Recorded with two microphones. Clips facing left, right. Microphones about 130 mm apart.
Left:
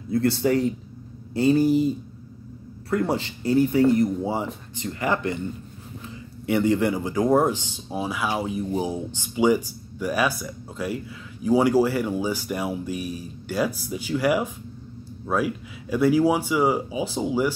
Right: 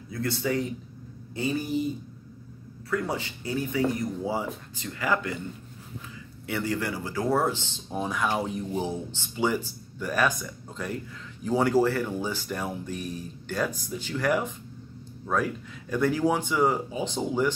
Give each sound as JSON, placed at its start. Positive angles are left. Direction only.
{"t": 0.1, "sound": "speech", "side_deg": 35}
{"t": 2.9, "sound": "speech", "side_deg": 35}
{"t": 4.0, "sound": "speech", "side_deg": 20}
{"t": 6.4, "sound": "speech", "side_deg": 20}